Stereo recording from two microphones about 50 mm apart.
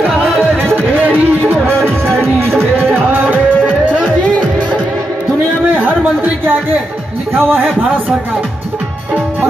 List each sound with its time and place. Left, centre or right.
0.4 s music: centre
0.9 s a sound: right
1.7 s music: right
2.9 s music: right
6.2 s a sound: right
7.3 s a man's voice: right